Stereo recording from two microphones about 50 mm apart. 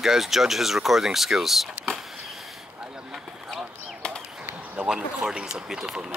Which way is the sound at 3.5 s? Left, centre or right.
Centre.